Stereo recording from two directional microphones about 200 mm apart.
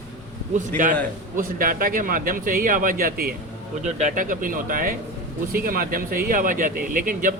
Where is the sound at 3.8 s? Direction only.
35° right (ahead or behind).